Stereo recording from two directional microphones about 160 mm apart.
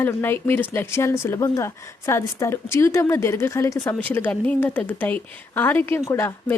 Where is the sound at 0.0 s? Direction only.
15° left (ahead or behind).